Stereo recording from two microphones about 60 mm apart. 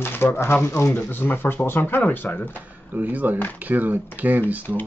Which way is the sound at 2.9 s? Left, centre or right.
Right.